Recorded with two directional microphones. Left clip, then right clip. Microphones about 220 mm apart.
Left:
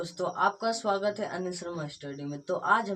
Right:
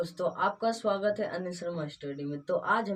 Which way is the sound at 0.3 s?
20° left (ahead or behind).